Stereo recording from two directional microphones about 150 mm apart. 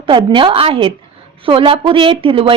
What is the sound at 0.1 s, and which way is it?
A woman's voice, 35° right (ahead or behind).